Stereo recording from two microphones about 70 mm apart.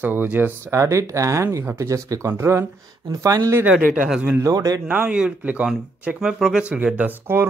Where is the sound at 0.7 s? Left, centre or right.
Right.